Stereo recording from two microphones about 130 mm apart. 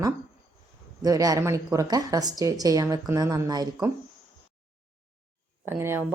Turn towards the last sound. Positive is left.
turn(degrees=-20)  # may be behind; listen again after turning